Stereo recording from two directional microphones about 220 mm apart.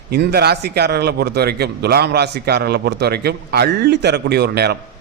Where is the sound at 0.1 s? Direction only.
45° right (ahead or behind).